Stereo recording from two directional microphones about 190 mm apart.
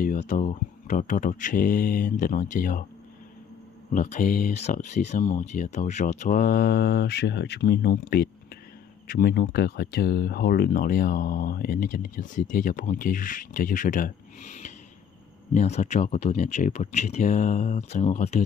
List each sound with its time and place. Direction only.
0.3 s speech: 40° left (ahead or behind)
3.9 s speech: 40° left (ahead or behind)